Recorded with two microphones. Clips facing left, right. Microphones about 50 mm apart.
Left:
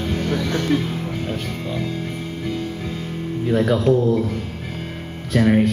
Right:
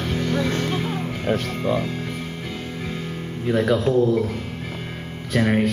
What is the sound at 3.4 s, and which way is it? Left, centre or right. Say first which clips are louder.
Speech: left 2 dB; centre.